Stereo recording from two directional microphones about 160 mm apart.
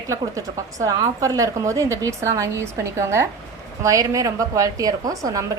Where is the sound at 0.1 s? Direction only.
20° right (ahead or behind).